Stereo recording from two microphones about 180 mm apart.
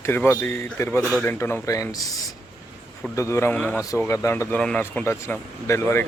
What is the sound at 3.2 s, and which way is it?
Speech, 15° left (ahead or behind).